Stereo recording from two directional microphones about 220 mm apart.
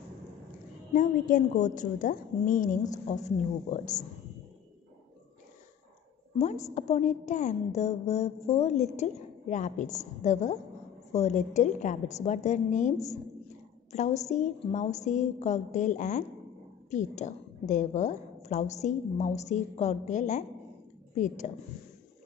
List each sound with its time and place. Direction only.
0.9 s a woman's voice: 35° left (ahead or behind)
6.3 s a woman's voice: 30° left (ahead or behind)